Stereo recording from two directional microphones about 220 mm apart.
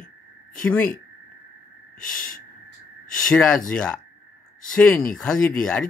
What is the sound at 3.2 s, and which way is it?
Speech, 5° left (ahead or behind).